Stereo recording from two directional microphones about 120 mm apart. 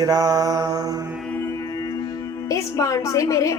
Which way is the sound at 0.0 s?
30° right (ahead or behind).